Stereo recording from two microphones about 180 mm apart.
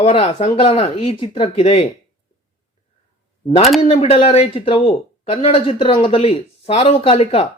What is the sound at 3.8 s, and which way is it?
Speech, 35° left (ahead or behind).